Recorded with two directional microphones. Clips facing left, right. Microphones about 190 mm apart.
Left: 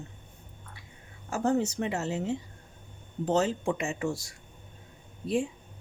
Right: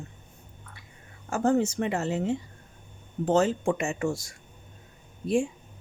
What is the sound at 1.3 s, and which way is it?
Speech, 50° right (ahead or behind).